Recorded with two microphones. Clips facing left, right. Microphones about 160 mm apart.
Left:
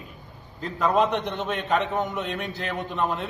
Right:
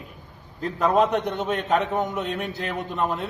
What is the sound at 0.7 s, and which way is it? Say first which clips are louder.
A man's voice: right 2 dB; centre (ahead or behind).